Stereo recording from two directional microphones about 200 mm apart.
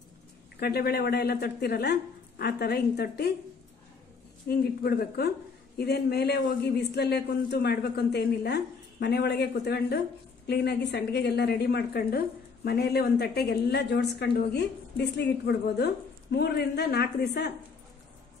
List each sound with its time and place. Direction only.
0.6 s a woman's voice: 50° left (ahead or behind)
4.5 s a woman's voice: 50° left (ahead or behind)